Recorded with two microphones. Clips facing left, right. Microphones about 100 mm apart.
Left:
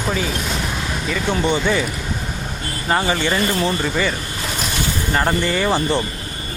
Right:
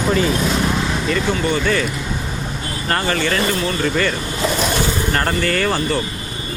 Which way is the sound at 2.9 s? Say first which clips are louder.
Left 1 dB; 10° left (ahead or behind).